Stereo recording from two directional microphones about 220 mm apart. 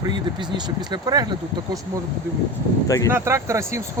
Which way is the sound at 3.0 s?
10° right (ahead or behind).